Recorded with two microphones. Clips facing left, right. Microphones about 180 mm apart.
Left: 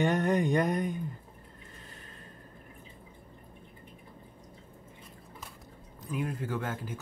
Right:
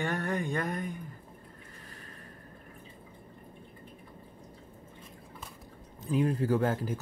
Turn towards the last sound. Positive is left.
turn(degrees=-35)  # may be behind; listen again after turning